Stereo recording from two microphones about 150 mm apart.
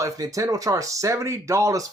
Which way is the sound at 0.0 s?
20° right (ahead or behind).